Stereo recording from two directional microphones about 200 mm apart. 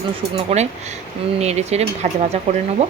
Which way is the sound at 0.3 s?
35° right (ahead or behind).